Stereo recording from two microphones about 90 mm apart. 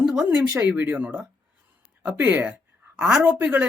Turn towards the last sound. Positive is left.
turn(degrees=-20)  # may be behind; listen again after turning